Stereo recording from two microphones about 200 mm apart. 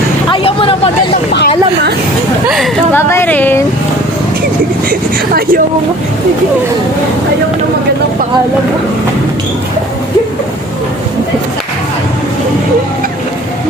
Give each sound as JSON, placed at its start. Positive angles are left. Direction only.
{"t": 0.3, "sound": "vehicle", "side_deg": 25}
{"t": 2.9, "sound": "speech", "side_deg": 10}
{"t": 4.9, "sound": "a sound", "side_deg": -45}